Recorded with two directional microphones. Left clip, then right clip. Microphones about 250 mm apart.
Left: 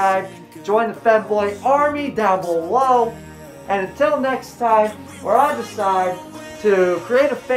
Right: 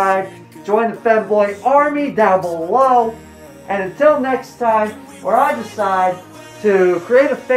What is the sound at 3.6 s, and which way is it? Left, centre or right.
Speech, centre.